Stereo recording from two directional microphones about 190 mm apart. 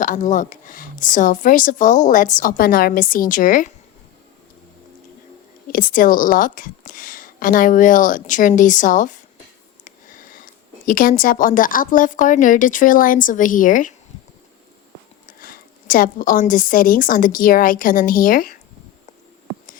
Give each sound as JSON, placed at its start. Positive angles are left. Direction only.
{"t": 0.0, "sound": "speech", "side_deg": 40}
{"t": 5.7, "sound": "speech", "side_deg": 45}
{"t": 15.3, "sound": "speech", "side_deg": 45}